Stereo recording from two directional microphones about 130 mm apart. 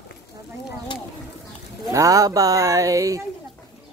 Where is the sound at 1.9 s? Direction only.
25° right (ahead or behind).